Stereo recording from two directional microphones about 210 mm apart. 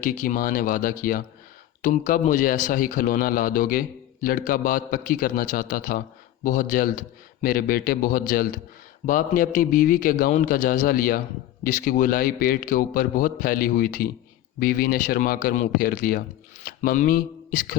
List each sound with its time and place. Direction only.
0.0 s a man's voice: 40° left (ahead or behind)